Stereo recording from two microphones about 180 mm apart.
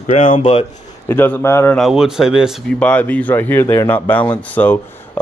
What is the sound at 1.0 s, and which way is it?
Speech, 10° left (ahead or behind).